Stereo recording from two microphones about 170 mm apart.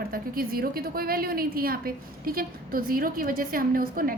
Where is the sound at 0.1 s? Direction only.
60° right (ahead or behind).